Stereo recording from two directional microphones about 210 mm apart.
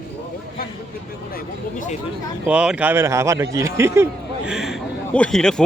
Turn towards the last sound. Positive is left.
turn(degrees=5)  # may be behind; listen again after turning